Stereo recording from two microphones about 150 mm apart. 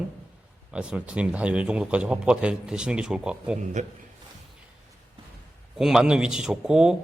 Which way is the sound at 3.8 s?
55° right (ahead or behind).